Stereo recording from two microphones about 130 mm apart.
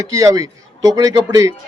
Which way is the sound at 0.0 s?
25° right (ahead or behind).